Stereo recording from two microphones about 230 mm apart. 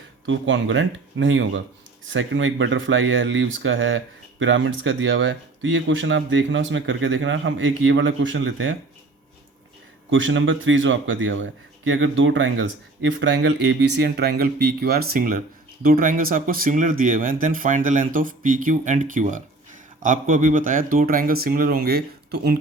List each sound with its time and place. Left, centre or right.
0.3 s speech: right
10.1 s speech: right